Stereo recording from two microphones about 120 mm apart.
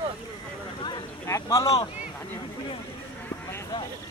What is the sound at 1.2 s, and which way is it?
Speech, 25° left (ahead or behind).